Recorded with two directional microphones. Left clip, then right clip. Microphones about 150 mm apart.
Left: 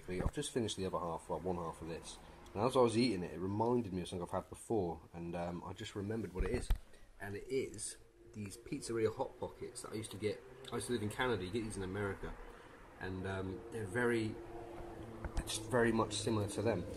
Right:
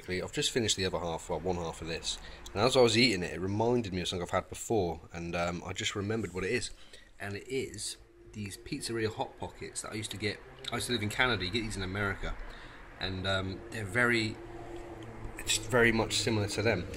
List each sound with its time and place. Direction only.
0.1 s a man's voice: 5° right (ahead or behind)
15.8 s speech: 5° right (ahead or behind)